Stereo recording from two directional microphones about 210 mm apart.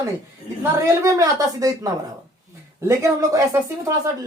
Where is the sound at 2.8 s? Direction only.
15° right (ahead or behind).